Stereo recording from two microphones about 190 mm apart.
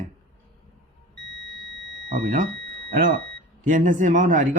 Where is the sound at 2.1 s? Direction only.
50° right (ahead or behind).